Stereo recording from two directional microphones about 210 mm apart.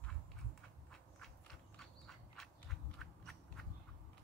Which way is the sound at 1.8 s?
Centre (ahead or behind).